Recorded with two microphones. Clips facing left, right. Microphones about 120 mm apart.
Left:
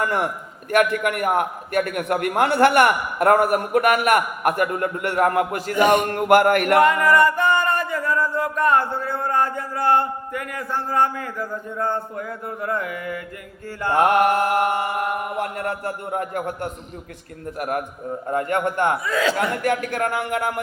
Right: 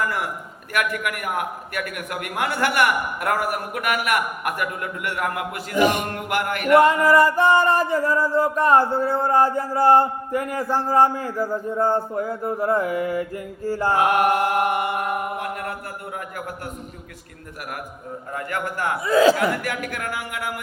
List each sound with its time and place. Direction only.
0.0 s a man's voice: 30° left (ahead or behind)
6.1 s a sound: 45° left (ahead or behind)
7.0 s music: 35° right (ahead or behind)
13.9 s a man's voice: 35° left (ahead or behind)
19.0 s music: 35° right (ahead or behind)
19.6 s a man's voice: 30° left (ahead or behind)